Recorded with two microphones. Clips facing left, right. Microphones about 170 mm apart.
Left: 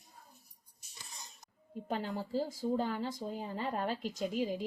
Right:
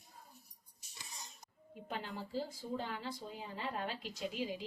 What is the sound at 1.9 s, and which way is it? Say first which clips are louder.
Speech: left 7 dB; 40° left (ahead or behind).